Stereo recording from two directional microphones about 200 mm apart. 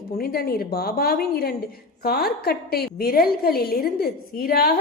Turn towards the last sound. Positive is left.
turn(degrees=50)  # may be behind; listen again after turning